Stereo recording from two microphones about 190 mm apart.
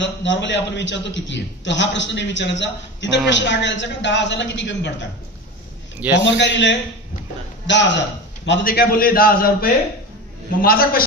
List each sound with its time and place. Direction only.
0.0 s a man's voice: 70° left (ahead or behind)
5.9 s a man's voice: 10° right (ahead or behind)
6.2 s a man's voice: 70° left (ahead or behind)
8.6 s a man's voice: 50° left (ahead or behind)